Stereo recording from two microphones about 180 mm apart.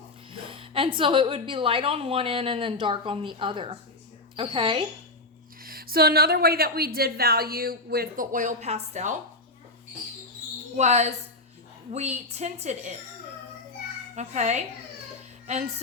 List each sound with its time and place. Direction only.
0.3 s a woman's voice: 30° right (ahead or behind)
5.6 s a woman's voice: 55° right (ahead or behind); by 9.1 s 40° right (ahead or behind)
10.8 s a woman's voice: 40° right (ahead or behind)
14.2 s a woman's voice: 40° right (ahead or behind)
15.4 s music: 40° right (ahead or behind)